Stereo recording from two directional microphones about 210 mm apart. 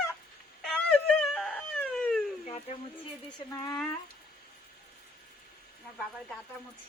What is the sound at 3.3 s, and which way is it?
Speech, 15° left (ahead or behind).